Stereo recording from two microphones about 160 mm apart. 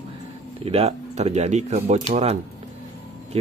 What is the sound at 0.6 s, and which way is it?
Speech, 40° right (ahead or behind).